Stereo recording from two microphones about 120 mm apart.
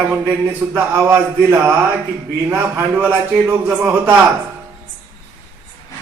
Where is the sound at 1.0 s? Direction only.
25° right (ahead or behind).